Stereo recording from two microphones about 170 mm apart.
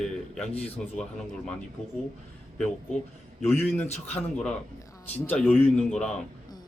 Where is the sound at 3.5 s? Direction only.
10° left (ahead or behind).